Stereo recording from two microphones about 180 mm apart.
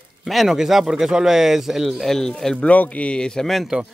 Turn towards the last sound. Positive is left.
turn(degrees=0)  # may be behind; listen again after turning